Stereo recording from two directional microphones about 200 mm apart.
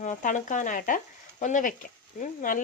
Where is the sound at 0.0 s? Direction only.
40° left (ahead or behind).